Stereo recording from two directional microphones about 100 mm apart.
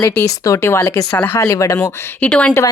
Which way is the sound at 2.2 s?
15° left (ahead or behind).